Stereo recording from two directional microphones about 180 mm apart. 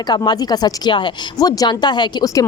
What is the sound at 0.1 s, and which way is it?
Speech, 20° left (ahead or behind).